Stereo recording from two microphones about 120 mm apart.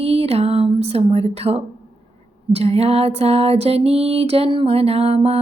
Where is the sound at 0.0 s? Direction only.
55° right (ahead or behind).